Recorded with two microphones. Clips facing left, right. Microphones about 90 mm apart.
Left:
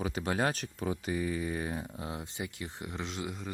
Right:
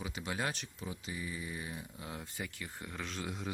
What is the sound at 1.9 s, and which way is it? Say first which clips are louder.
Speech: left 5 dB; 25° left (ahead or behind).